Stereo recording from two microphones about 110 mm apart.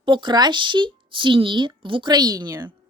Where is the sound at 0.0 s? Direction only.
45° right (ahead or behind).